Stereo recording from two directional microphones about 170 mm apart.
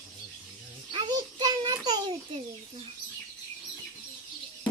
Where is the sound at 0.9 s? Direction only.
25° right (ahead or behind).